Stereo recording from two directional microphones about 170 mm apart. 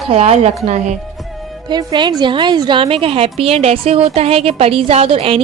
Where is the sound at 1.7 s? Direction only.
25° right (ahead or behind).